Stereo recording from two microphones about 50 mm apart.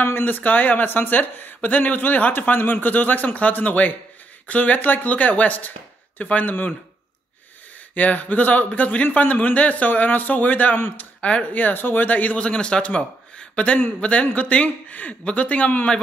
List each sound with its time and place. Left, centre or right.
0.0 s speech: left
7.9 s speech: left
12.4 s a man's voice: centre